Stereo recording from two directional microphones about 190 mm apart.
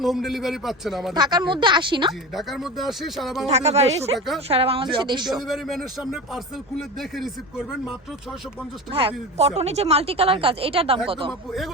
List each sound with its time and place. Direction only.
0.0 s speech: centre (ahead or behind)
1.1 s speech: 20° right (ahead or behind)
2.3 s speech: centre (ahead or behind)
3.4 s speech: 35° right (ahead or behind)
5.3 s speech: centre (ahead or behind)
8.9 s speech: 30° right (ahead or behind)
11.3 s speech: centre (ahead or behind)